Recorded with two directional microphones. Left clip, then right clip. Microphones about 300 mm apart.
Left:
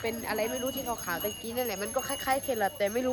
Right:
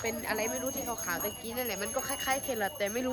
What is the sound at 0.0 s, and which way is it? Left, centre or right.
Speech, centre.